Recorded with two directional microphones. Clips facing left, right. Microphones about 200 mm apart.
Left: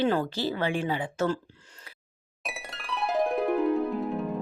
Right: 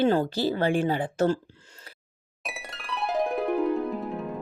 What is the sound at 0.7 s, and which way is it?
Speech, 50° right (ahead or behind).